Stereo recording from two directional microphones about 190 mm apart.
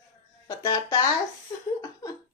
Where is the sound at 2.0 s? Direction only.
20° left (ahead or behind).